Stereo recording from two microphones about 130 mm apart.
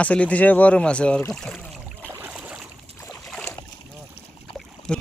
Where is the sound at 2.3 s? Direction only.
5° right (ahead or behind).